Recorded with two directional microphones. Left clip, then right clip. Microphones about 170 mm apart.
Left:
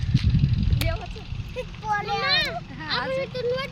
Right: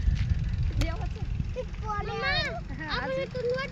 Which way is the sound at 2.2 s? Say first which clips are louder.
Left 6 dB; 30° left (ahead or behind).